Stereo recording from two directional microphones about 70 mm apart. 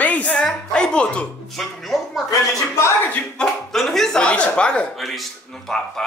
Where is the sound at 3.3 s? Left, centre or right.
Centre.